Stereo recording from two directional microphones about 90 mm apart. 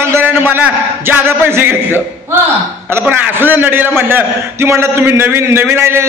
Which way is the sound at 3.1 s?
25° right (ahead or behind).